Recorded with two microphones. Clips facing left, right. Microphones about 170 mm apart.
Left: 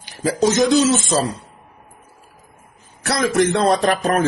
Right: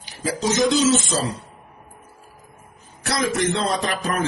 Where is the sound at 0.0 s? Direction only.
65° left (ahead or behind).